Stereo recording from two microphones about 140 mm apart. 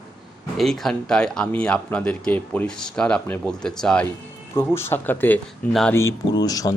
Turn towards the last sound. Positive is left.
turn(degrees=25)  # may be behind; listen again after turning